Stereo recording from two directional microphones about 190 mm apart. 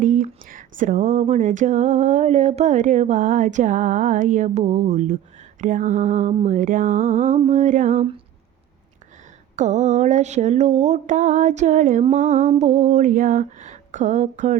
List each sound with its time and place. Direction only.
0.0 s speech: 45° right (ahead or behind)
9.6 s speech: 40° right (ahead or behind)